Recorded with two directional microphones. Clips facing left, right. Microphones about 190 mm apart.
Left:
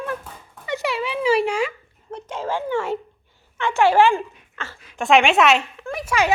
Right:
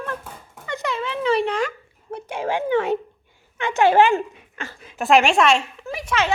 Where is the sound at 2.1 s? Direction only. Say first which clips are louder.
Right 2 dB; 10° right (ahead or behind).